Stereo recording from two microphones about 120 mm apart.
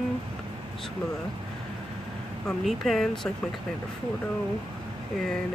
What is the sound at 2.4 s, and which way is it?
Speech, centre (ahead or behind).